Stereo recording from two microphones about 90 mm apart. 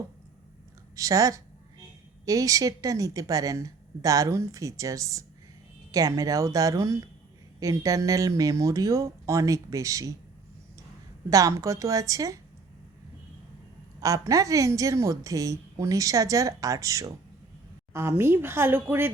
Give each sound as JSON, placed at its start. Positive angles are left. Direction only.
{"t": 0.9, "sound": "a woman's voice", "side_deg": -40}
{"t": 11.3, "sound": "a woman's voice", "side_deg": -40}
{"t": 14.0, "sound": "a woman's voice", "side_deg": -40}